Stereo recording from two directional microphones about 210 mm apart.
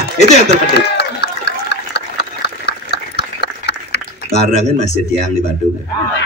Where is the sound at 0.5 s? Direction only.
55° left (ahead or behind).